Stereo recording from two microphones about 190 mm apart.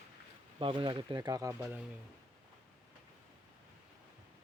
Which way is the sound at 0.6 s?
25° right (ahead or behind).